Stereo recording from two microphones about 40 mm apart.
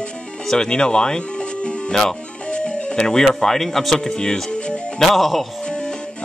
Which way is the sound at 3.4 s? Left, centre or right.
Centre.